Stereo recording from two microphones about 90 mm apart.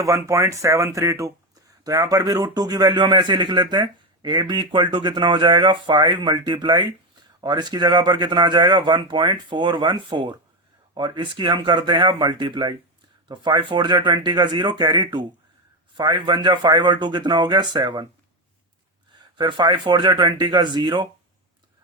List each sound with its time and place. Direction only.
0.0 s speech: 35° right (ahead or behind); by 18.0 s 55° right (ahead or behind)
19.4 s speech: 55° right (ahead or behind)